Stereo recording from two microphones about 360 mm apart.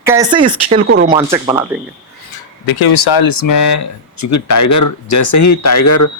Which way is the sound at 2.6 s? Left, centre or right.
Left.